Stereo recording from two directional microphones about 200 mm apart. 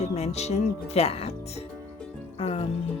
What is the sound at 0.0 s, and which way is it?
Speech, 30° left (ahead or behind).